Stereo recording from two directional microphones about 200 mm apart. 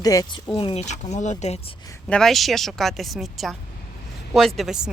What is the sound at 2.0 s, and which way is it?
Speech, 5° left (ahead or behind).